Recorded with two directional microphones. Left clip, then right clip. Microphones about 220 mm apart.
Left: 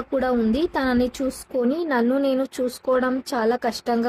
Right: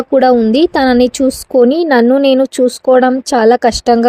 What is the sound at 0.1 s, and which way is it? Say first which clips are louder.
Speech: right 13 dB; 35° right (ahead or behind).